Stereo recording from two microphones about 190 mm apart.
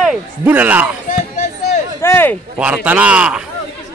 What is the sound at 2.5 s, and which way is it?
Speech, 5° right (ahead or behind).